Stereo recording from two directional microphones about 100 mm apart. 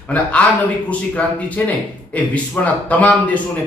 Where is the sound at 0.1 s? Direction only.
15° left (ahead or behind).